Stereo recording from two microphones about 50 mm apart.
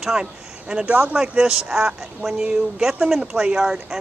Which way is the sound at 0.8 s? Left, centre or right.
Right.